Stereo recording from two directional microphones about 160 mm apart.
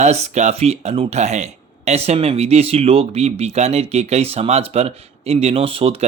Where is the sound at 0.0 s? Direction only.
45° right (ahead or behind).